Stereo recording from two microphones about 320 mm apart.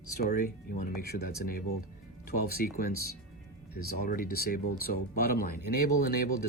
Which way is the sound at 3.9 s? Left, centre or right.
Left.